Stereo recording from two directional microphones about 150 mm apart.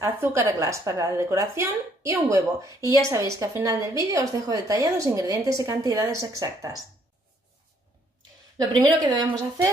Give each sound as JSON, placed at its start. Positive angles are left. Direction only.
{"t": 0.0, "sound": "a woman's voice", "side_deg": -20}
{"t": 8.5, "sound": "a woman's voice", "side_deg": -25}